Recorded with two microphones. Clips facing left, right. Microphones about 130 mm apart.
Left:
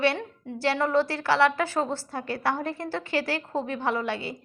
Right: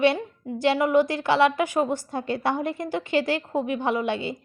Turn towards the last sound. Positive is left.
turn(degrees=-20)  # may be behind; listen again after turning